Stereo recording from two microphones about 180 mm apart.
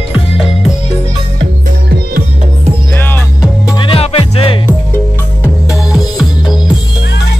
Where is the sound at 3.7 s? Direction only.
30° left (ahead or behind).